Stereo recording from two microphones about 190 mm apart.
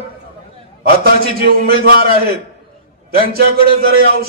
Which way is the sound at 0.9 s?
55° right (ahead or behind).